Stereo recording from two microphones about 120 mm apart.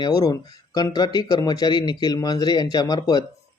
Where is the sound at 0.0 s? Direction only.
35° left (ahead or behind).